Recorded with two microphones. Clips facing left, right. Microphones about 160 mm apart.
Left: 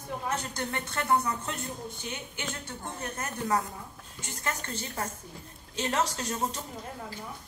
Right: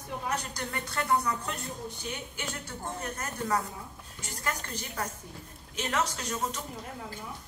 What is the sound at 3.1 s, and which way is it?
Speech, 25° left (ahead or behind).